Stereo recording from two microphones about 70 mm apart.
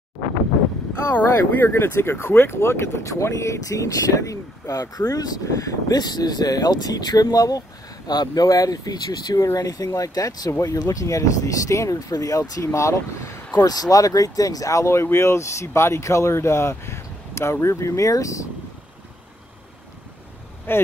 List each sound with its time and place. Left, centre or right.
1.1 s speech: left
12.6 s speech: left
13.7 s speech: left
20.7 s speech: left